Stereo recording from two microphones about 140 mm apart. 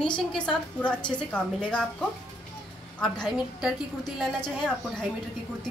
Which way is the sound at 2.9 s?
5° left (ahead or behind).